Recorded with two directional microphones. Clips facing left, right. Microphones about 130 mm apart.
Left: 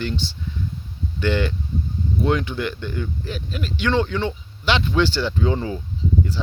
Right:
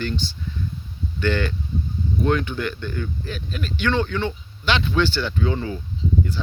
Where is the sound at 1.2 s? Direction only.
20° left (ahead or behind).